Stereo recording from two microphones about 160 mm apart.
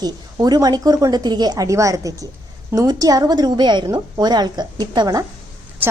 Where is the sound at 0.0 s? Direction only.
25° right (ahead or behind).